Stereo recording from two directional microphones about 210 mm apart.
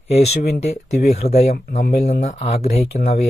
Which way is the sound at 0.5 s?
30° left (ahead or behind).